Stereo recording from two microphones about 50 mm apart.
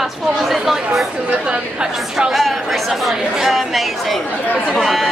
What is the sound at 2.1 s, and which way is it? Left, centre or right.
Speech, centre.